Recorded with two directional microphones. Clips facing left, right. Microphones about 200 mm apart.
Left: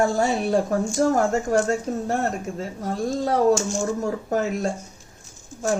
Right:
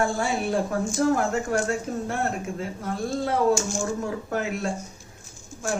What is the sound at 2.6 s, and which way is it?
Speech, 40° left (ahead or behind).